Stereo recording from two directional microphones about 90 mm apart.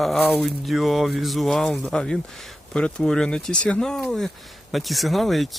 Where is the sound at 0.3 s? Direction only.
Centre (ahead or behind).